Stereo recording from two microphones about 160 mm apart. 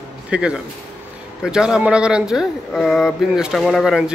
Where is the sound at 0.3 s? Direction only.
5° right (ahead or behind).